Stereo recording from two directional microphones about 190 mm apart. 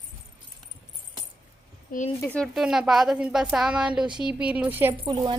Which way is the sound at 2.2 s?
5° left (ahead or behind).